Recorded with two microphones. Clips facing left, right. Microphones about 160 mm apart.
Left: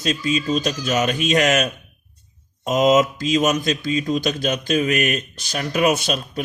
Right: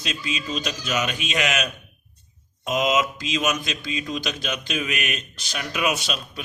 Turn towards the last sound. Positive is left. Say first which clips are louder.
# left 6 dB
turn(degrees=45)  # may be behind; listen again after turning